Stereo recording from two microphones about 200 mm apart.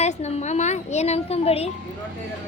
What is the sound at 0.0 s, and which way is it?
A woman's voice, 35° left (ahead or behind).